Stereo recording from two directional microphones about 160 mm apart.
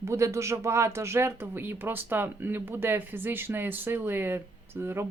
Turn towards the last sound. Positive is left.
turn(degrees=-15)  # may be behind; listen again after turning